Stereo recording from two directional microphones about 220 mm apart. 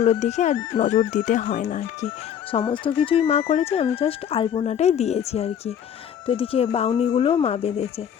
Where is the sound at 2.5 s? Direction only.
25° left (ahead or behind).